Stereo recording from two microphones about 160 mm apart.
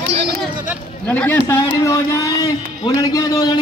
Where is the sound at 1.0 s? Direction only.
10° left (ahead or behind).